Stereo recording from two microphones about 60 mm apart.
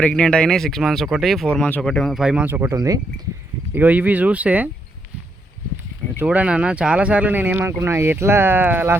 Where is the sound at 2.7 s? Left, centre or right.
Right.